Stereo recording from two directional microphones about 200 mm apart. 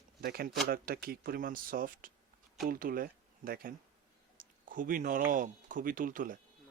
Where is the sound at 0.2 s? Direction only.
50° right (ahead or behind).